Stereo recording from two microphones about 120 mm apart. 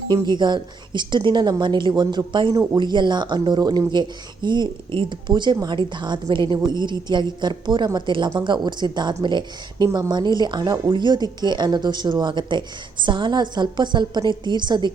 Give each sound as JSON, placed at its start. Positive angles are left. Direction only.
{"t": 0.1, "sound": "speech", "side_deg": -40}